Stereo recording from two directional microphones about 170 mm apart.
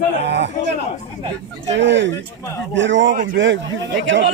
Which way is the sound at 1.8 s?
90° right.